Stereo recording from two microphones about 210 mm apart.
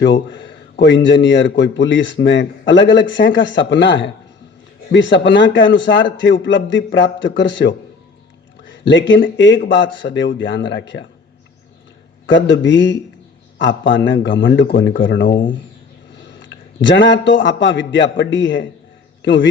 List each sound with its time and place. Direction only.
0.0 s a man's voice: 60° left (ahead or behind)
8.9 s a man's voice: 60° left (ahead or behind)
12.2 s a man's voice: 60° left (ahead or behind)
16.8 s a man's voice: 60° left (ahead or behind)